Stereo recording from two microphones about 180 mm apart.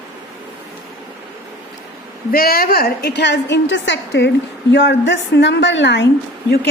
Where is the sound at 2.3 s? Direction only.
55° left (ahead or behind).